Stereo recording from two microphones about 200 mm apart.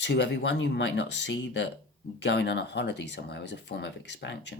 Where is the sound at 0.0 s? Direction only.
60° left (ahead or behind).